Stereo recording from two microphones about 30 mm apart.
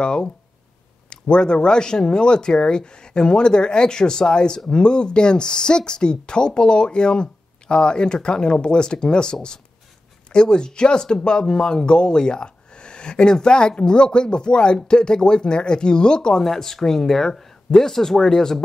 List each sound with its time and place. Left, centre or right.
0.0 s speech: left
16.4 s speech: centre